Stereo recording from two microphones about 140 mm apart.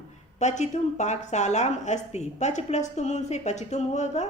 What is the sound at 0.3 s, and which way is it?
A woman's voice, 55° left (ahead or behind).